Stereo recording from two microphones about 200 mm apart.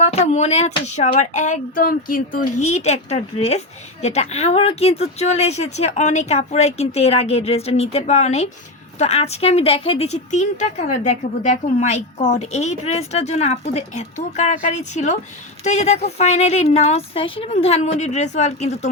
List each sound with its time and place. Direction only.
0.0 s speech: 35° left (ahead or behind)